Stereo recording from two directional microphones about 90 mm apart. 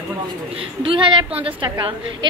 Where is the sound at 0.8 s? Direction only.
70° right (ahead or behind).